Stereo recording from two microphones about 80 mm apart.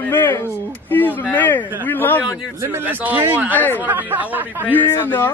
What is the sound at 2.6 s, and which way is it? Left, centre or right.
Speech, right.